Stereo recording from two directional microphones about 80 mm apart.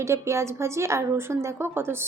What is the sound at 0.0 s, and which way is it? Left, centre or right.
Speech, right.